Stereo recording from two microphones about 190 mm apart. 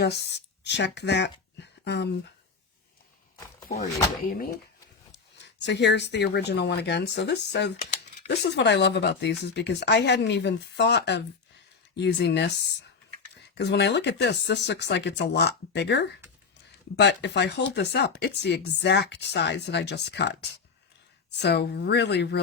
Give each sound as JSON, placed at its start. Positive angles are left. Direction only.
{"t": 0.0, "sound": "speech", "side_deg": 65}
{"t": 4.3, "sound": "speech", "side_deg": 50}
{"t": 5.1, "sound": "speech", "side_deg": 65}
{"t": 13.6, "sound": "speech", "side_deg": 65}